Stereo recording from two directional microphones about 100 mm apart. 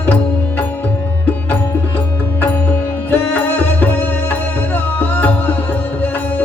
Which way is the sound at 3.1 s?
20° left (ahead or behind).